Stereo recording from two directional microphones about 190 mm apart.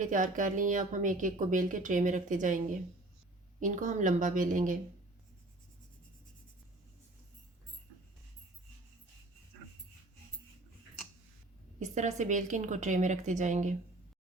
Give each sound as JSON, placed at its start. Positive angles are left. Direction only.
{"t": 0.0, "sound": "a woman's voice", "side_deg": -45}
{"t": 3.6, "sound": "a woman's voice", "side_deg": -40}
{"t": 11.8, "sound": "a woman's voice", "side_deg": -40}